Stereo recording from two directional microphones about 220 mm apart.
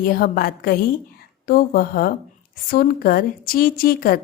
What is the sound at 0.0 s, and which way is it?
A woman's voice, 40° left (ahead or behind).